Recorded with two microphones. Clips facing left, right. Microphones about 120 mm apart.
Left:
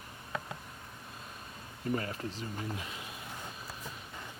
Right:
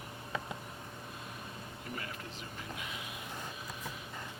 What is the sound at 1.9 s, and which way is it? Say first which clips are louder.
Speech: left 8 dB; 35° left (ahead or behind).